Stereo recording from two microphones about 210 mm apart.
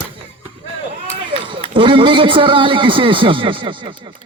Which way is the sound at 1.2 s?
25° right (ahead or behind).